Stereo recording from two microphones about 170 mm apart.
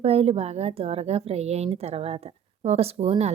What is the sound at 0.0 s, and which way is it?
A woman's voice, 35° right (ahead or behind).